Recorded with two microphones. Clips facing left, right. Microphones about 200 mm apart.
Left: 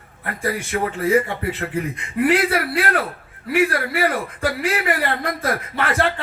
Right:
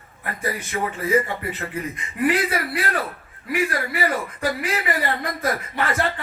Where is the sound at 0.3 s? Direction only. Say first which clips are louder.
Left 4 dB; 65° left (ahead or behind).